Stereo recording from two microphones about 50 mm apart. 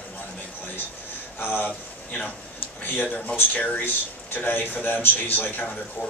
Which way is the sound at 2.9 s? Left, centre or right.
Left.